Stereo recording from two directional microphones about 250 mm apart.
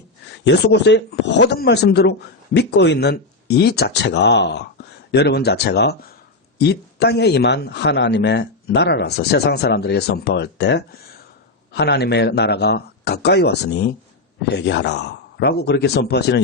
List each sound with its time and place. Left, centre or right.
0.4 s a man's voice: left